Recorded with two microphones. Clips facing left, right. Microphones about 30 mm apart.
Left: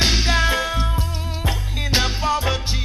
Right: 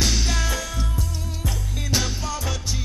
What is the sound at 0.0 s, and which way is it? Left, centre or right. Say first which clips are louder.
Music: left 6 dB; left.